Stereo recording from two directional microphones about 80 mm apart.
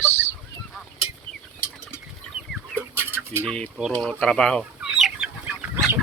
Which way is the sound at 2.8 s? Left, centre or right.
Right.